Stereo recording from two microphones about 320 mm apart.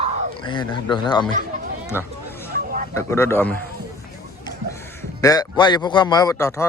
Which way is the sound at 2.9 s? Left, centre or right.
Centre.